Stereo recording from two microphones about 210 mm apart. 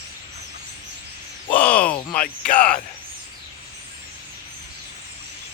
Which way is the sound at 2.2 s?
40° left (ahead or behind).